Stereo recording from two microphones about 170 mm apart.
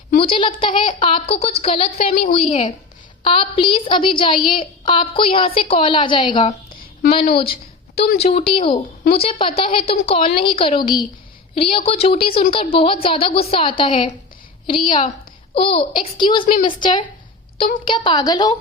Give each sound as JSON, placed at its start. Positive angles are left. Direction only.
{"t": 0.2, "sound": "a woman's voice", "side_deg": 30}
{"t": 6.7, "sound": "a sound", "side_deg": 60}
{"t": 7.1, "sound": "a woman's voice", "side_deg": 30}